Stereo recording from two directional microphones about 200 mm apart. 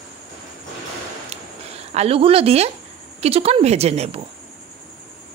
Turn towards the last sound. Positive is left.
turn(degrees=-30)  # may be behind; listen again after turning